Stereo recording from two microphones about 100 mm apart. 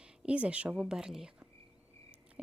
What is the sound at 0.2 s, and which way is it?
Speech, 10° right (ahead or behind).